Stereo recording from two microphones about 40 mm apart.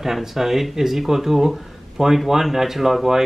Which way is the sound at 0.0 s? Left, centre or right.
Centre.